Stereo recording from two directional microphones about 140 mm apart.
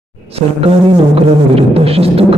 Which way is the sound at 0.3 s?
45° right (ahead or behind).